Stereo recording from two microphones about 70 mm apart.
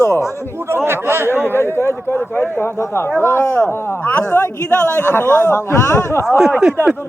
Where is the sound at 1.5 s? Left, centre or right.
Left.